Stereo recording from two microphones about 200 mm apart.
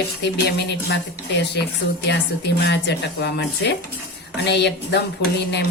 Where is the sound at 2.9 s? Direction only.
55° left (ahead or behind).